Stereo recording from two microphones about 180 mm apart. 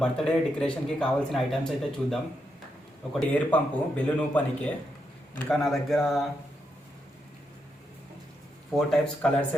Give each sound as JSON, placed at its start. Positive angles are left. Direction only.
{"t": 0.0, "sound": "a man's voice", "side_deg": 5}
{"t": 8.7, "sound": "speech", "side_deg": 0}